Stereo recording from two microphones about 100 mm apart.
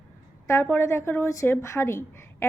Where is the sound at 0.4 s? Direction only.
25° left (ahead or behind).